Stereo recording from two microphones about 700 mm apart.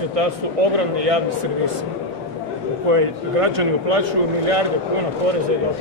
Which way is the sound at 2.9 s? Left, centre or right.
Right.